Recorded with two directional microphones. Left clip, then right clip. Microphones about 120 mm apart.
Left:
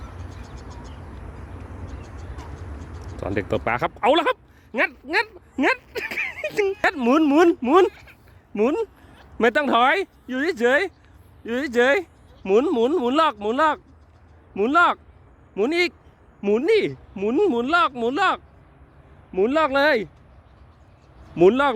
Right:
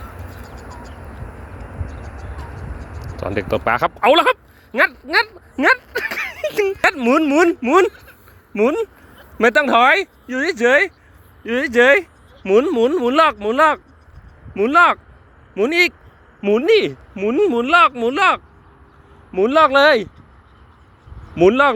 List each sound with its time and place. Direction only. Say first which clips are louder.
2.0 s vehicle: right 5 dB; 25° left (ahead or behind)
3.2 s speech: right 4 dB; 20° left (ahead or behind)
6.9 s speech: right 3 dB; 30° left (ahead or behind)
7.8 s speech: right 4 dB; 10° left (ahead or behind)
8.5 s speech: right 5 dB; 20° left (ahead or behind)
11.4 s speech: right 6 dB; 5° left (ahead or behind)
17.2 s speech: right 4 dB; 15° left (ahead or behind)
21.3 s speech: right 4 dB; 15° left (ahead or behind)